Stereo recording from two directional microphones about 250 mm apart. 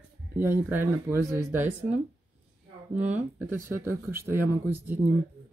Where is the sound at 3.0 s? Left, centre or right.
Centre.